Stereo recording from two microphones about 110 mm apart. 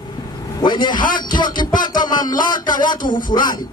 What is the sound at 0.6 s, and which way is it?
A man's voice, 40° left (ahead or behind).